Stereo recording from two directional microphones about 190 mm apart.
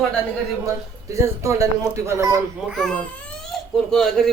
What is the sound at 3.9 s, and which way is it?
Speech, 5° left (ahead or behind).